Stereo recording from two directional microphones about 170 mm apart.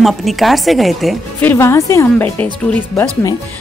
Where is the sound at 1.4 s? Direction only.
15° left (ahead or behind).